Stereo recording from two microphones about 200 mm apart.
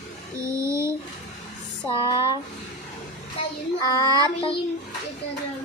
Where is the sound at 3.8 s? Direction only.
20° left (ahead or behind).